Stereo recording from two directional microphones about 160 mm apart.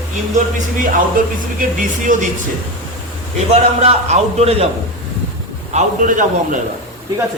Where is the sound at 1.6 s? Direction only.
55° right (ahead or behind).